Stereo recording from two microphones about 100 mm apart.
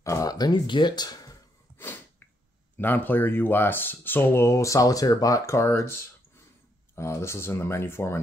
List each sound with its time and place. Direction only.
0.0 s speech: 35° left (ahead or behind)
1.8 s sneeze: 20° left (ahead or behind)
2.8 s speech: 20° left (ahead or behind)